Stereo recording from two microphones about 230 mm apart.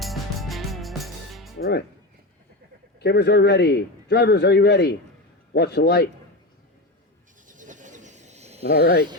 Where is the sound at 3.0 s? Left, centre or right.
Left.